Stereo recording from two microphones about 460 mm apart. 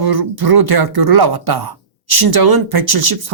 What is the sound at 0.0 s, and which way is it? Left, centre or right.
Speech, right.